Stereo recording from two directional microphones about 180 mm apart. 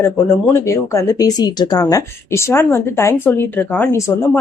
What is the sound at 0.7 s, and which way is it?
Speech, 15° left (ahead or behind).